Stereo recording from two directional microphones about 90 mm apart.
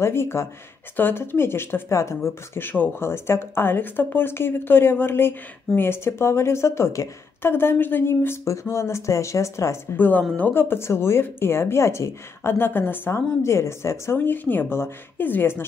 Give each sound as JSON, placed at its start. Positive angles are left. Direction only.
{"t": 0.0, "sound": "speech", "side_deg": 30}
{"t": 9.9, "sound": "speech", "side_deg": 20}